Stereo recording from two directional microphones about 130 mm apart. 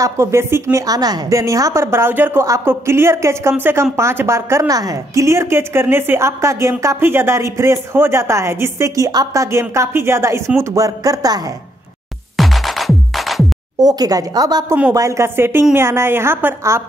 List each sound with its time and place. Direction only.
0.0 s a woman's voice: 20° right (ahead or behind)
12.4 s music: centre (ahead or behind)
13.7 s a woman's voice: 30° right (ahead or behind)